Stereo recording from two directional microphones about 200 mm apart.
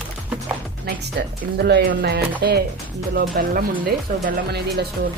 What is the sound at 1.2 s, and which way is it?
Speech, 55° right (ahead or behind).